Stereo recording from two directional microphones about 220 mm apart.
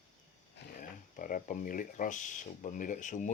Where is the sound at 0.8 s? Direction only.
40° left (ahead or behind).